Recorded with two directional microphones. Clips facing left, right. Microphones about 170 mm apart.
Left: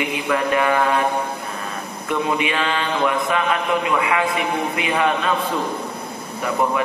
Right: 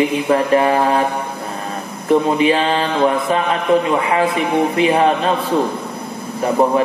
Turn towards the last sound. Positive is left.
turn(degrees=-35)  # may be behind; listen again after turning